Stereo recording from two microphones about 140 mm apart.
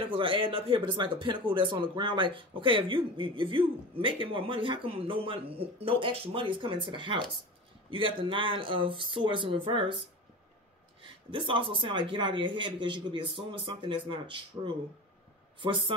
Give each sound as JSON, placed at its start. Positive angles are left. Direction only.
{"t": 0.0, "sound": "speech", "side_deg": -40}
{"t": 11.0, "sound": "speech", "side_deg": -40}